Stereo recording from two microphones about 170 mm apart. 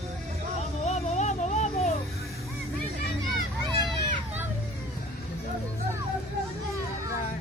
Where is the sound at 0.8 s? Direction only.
40° left (ahead or behind).